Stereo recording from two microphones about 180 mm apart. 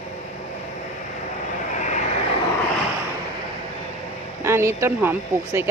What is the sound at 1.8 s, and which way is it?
Vehicle, 40° left (ahead or behind).